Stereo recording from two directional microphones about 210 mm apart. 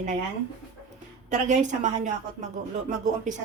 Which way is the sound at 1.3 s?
35° right (ahead or behind).